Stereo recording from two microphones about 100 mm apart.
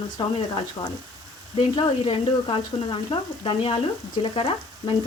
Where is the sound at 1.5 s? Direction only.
60° left (ahead or behind).